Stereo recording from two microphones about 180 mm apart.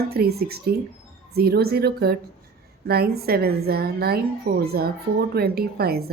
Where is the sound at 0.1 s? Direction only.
60° right (ahead or behind).